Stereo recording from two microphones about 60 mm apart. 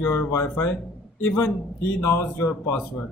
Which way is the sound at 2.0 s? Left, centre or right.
Left.